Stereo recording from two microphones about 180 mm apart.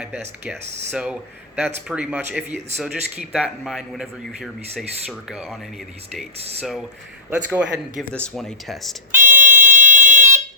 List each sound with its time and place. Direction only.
0.9 s a man's voice: 5° right (ahead or behind)
6.3 s speech: 35° right (ahead or behind)
6.6 s a man's voice: centre (ahead or behind)
8.1 s a man's voice: 5° left (ahead or behind)
9.1 s fire alarm: 10° right (ahead or behind)